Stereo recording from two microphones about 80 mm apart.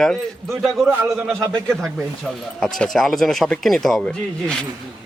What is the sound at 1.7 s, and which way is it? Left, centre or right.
Speech, centre.